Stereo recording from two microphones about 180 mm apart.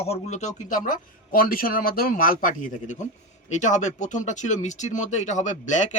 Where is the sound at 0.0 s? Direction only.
35° left (ahead or behind).